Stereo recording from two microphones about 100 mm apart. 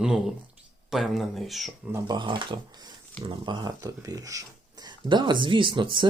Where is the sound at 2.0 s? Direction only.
50° right (ahead or behind).